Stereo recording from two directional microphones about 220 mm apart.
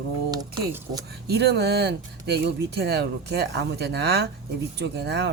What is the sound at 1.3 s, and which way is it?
Speech, 50° right (ahead or behind).